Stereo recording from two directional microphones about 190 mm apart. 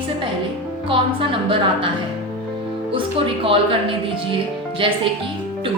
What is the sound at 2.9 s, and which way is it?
Speech, 30° right (ahead or behind).